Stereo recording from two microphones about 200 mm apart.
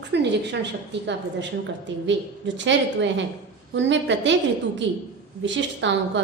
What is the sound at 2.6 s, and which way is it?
A woman's voice, 65° right (ahead or behind).